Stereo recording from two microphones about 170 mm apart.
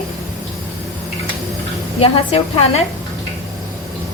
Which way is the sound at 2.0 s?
35° left (ahead or behind).